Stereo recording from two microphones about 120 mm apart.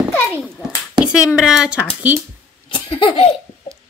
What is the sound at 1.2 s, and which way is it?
Speech, 5° right (ahead or behind).